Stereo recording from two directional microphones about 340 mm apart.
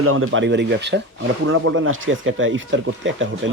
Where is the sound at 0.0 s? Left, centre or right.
Right.